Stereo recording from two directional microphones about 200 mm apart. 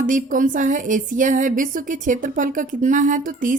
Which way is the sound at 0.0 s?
40° right (ahead or behind).